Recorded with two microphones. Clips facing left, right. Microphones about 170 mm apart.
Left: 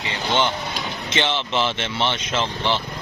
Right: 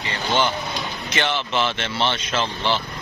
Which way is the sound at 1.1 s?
25° left (ahead or behind).